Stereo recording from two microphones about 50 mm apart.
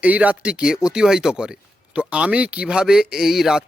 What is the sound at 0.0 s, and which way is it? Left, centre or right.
Speech, right.